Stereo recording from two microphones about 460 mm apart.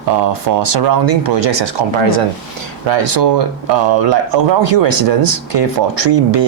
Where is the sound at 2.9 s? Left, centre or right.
Right.